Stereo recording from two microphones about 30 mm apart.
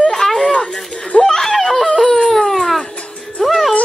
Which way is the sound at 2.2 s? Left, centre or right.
Centre.